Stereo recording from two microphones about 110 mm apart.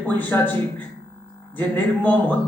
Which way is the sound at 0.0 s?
15° left (ahead or behind).